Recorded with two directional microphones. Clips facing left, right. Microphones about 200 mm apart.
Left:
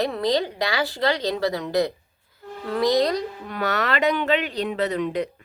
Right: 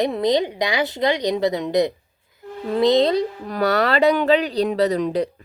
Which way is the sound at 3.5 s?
35° right (ahead or behind).